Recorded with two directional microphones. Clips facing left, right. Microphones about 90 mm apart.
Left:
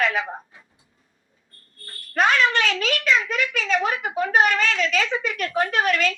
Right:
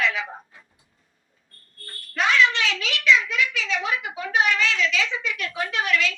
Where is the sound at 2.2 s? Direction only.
45° left (ahead or behind).